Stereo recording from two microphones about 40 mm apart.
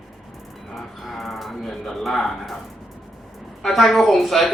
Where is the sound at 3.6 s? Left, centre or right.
Centre.